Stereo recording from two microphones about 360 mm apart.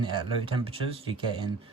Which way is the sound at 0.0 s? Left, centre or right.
Centre.